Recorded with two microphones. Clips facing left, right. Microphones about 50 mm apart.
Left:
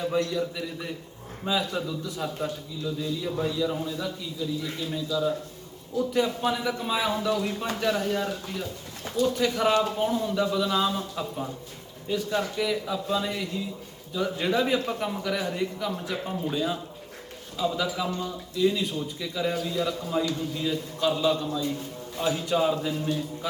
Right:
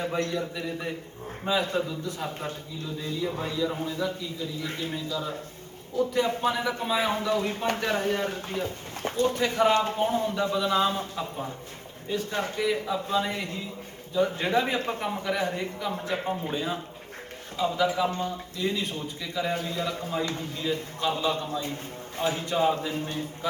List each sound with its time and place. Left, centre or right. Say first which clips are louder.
0.0 s a man's voice: left 2 dB; right